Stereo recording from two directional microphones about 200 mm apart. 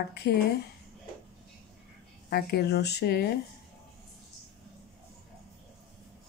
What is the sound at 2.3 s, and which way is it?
Speech, 55° left (ahead or behind).